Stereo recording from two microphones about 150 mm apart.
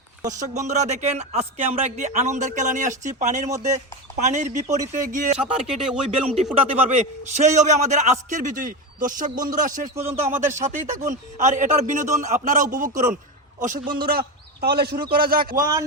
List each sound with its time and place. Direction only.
0.3 s a man's voice: 55° right (ahead or behind)
5.4 s speech: 5° right (ahead or behind)
6.3 s a man's voice: 50° right (ahead or behind)
9.9 s speech: 15° right (ahead or behind)
10.6 s a man's voice: 60° right (ahead or behind)
13.9 s a man's voice: 85° right
15.5 s a man's voice: 25° right (ahead or behind)